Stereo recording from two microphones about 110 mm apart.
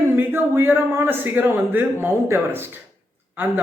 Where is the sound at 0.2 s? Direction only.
20° right (ahead or behind).